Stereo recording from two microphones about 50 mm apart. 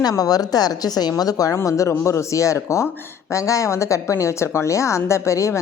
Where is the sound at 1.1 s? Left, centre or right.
Left.